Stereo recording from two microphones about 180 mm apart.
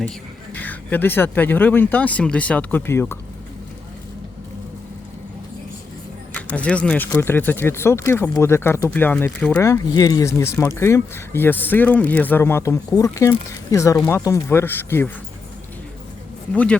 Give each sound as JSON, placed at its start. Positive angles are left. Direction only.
{"t": 0.5, "sound": "speech", "side_deg": 10}
{"t": 6.3, "sound": "speech", "side_deg": 5}